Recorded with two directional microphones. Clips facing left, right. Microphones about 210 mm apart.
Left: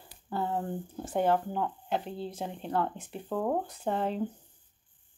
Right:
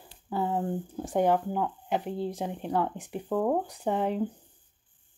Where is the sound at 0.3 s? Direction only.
10° right (ahead or behind).